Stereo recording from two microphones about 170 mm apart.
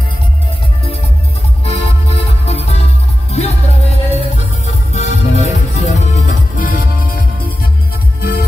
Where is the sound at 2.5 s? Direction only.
40° left (ahead or behind).